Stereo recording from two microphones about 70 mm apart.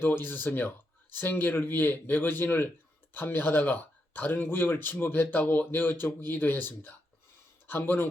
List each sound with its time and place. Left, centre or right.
0.0 s speech: left